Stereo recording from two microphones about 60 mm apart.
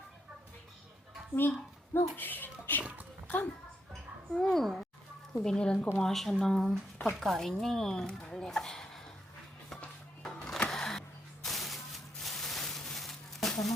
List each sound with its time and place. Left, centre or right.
1.4 s speech: left
4.3 s speech: centre
10.2 s sewing machine: centre
10.7 s a sound: centre